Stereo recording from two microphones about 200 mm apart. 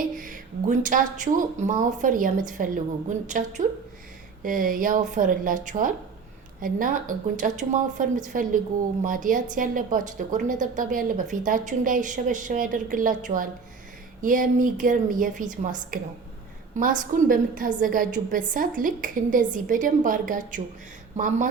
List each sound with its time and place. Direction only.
0.2 s a woman's voice: 40° right (ahead or behind)